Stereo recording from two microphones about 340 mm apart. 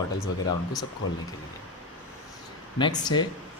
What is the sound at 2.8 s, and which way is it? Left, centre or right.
Speech, centre.